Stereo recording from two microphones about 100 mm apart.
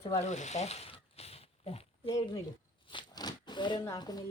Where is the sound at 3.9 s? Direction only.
45° left (ahead or behind).